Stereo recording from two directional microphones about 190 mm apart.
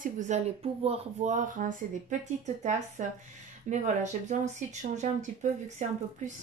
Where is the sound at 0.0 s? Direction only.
40° right (ahead or behind).